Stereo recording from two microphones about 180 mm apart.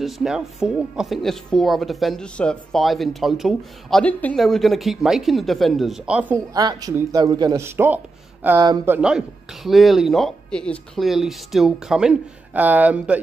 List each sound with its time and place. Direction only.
0.0 s speech: 5° right (ahead or behind)
6.3 s speech: 20° right (ahead or behind)
8.5 s speech: 25° right (ahead or behind)
8.8 s speech: 10° right (ahead or behind)